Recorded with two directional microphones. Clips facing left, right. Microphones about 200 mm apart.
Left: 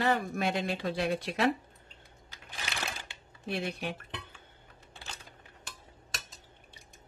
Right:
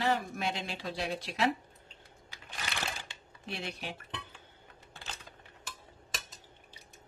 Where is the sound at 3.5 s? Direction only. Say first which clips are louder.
Left 6 dB; 55° left (ahead or behind).